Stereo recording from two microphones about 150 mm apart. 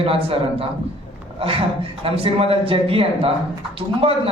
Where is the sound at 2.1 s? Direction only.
40° right (ahead or behind).